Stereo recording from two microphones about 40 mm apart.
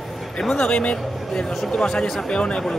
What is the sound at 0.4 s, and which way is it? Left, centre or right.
Speech, centre.